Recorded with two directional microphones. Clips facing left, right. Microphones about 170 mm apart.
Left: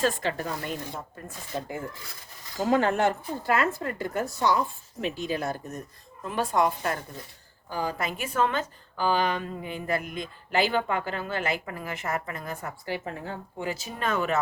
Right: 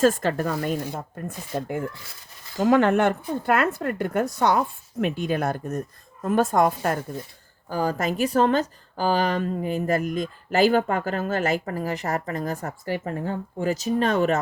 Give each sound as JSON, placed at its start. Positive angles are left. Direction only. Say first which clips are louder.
{"t": 0.0, "sound": "speech", "louder": "right 6 dB", "side_deg": -45}